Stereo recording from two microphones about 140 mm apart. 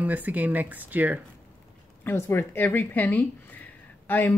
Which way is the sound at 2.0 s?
15° left (ahead or behind).